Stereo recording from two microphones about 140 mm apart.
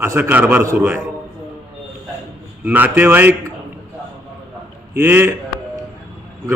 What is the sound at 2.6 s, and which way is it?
Speech, 10° right (ahead or behind).